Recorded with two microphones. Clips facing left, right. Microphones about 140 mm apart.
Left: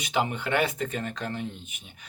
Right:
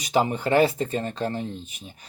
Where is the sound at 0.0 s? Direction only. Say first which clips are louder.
Right 5 dB; 35° right (ahead or behind).